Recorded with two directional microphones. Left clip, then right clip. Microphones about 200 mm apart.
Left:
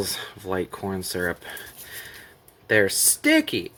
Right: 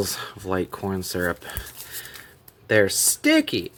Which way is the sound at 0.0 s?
15° right (ahead or behind).